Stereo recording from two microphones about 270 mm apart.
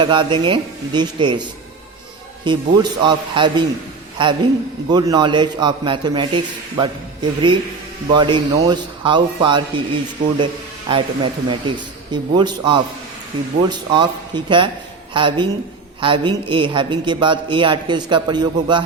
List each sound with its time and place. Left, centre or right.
0.0 s a woman's voice: centre